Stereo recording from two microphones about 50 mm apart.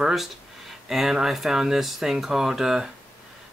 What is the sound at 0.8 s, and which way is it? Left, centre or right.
Speech, centre.